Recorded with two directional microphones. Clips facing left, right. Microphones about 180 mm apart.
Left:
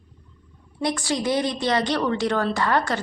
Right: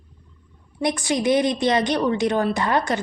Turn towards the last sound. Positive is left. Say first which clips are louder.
# right 1 dB
turn(degrees=-20)  # may be behind; listen again after turning